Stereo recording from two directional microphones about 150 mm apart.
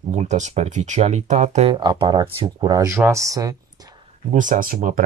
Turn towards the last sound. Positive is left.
turn(degrees=-65)  # may be behind; listen again after turning